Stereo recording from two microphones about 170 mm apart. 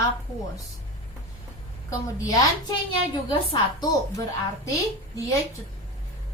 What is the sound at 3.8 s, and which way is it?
Speech, 20° left (ahead or behind).